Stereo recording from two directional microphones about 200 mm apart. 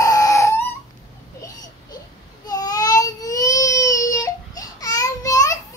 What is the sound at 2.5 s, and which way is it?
Baby cry, 20° left (ahead or behind).